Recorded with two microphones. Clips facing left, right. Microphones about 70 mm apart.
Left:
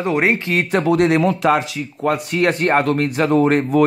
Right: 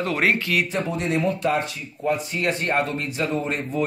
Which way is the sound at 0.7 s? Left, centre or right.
Left.